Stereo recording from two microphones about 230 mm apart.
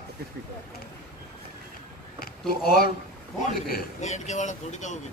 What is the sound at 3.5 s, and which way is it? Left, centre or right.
A man's voice, left.